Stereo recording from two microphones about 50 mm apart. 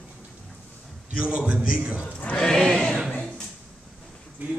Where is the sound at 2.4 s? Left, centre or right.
Centre.